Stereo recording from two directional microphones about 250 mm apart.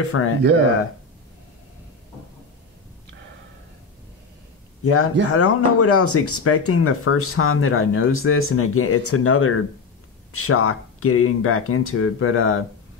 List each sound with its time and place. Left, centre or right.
0.1 s speech: left
4.8 s speech: left